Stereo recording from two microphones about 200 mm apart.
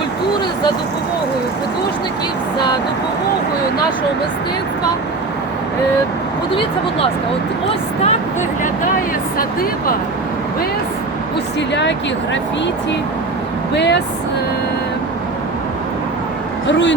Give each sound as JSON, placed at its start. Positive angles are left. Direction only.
{"t": 6.5, "sound": "speech", "side_deg": 25}
{"t": 9.4, "sound": "speech", "side_deg": 45}
{"t": 11.7, "sound": "speech", "side_deg": 60}
{"t": 13.7, "sound": "speech", "side_deg": 60}